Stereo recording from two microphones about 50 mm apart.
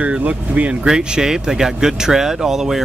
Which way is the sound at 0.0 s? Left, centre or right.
Right.